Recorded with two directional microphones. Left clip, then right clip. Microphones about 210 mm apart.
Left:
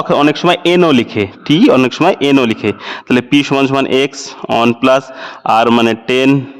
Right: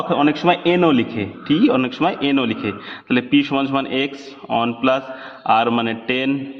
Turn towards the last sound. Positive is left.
turn(degrees=45)  # may be behind; listen again after turning